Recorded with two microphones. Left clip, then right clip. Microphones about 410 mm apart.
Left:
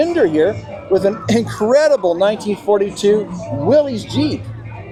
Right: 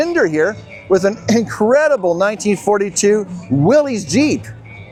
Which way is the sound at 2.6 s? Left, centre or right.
Right.